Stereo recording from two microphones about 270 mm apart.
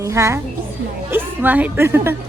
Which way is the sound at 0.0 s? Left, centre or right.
Centre.